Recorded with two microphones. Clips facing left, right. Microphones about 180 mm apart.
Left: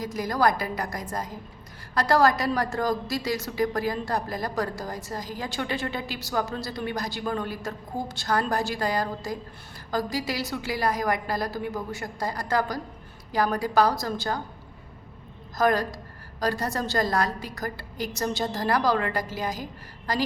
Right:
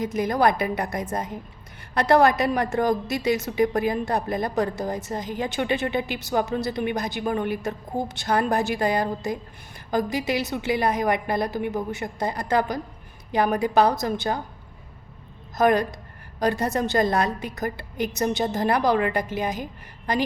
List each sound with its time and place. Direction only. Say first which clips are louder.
0.0 s a woman's voice: right 3 dB; 20° right (ahead or behind)
15.5 s a woman's voice: right 3 dB; 20° right (ahead or behind)